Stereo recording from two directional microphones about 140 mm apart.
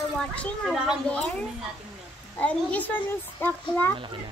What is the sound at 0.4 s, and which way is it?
Speech, 5° left (ahead or behind).